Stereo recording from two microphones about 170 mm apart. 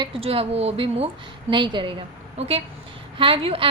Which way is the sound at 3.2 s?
30° right (ahead or behind).